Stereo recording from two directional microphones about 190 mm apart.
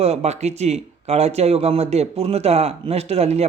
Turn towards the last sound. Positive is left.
turn(degrees=-35)  # may be behind; listen again after turning